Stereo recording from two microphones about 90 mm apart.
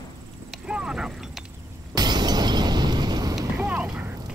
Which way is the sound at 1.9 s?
50° right (ahead or behind).